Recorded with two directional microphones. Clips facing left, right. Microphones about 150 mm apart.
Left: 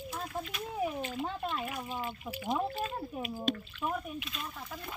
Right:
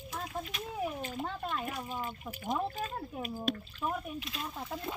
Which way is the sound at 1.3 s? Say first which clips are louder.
Left 1 dB; 10° left (ahead or behind).